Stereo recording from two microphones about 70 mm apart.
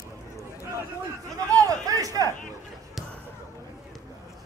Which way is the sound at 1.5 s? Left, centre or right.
Right.